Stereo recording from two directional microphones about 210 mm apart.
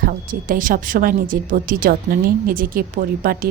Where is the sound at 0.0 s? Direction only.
40° right (ahead or behind).